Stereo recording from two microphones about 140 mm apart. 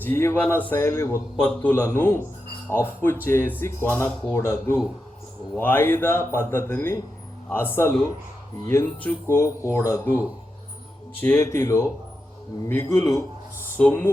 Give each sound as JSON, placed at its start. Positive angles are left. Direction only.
{"t": 0.0, "sound": "a man's voice", "side_deg": 15}
{"t": 9.0, "sound": "a man's voice", "side_deg": 20}